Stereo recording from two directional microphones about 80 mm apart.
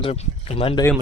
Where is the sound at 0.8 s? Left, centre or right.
Left.